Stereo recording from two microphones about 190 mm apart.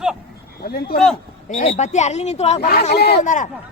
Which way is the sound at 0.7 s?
55° left (ahead or behind).